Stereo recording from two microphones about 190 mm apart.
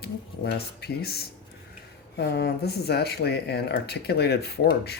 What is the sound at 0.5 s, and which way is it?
Speech, 55° left (ahead or behind).